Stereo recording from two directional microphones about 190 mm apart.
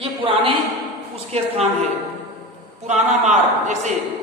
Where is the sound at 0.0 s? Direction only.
30° right (ahead or behind).